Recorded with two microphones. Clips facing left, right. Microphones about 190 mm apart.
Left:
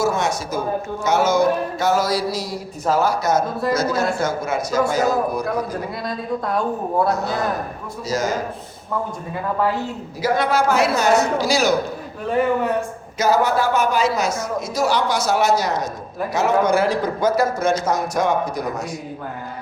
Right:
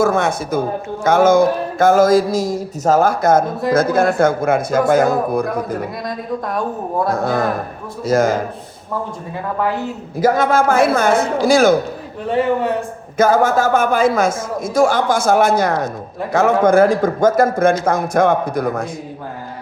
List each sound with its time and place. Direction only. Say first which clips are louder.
0.0 s a woman's voice: right 5 dB; 55° right (ahead or behind)
7.1 s a man's voice: right 4 dB; 55° right (ahead or behind)
10.2 s a man's voice: right 5 dB; 45° right (ahead or behind)
12.3 s speech: right 2 dB; 30° right (ahead or behind)
13.1 s a man's voice: right 4 dB; 50° right (ahead or behind)